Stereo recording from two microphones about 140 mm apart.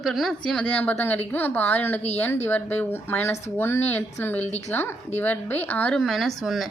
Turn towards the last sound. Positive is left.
turn(degrees=0)  # may be behind; listen again after turning